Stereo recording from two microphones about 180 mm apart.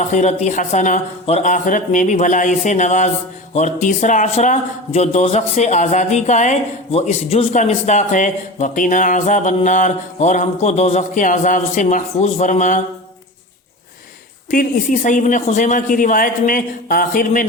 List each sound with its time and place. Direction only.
0.0 s a man's voice: 40° left (ahead or behind)
14.5 s a man's voice: 50° left (ahead or behind)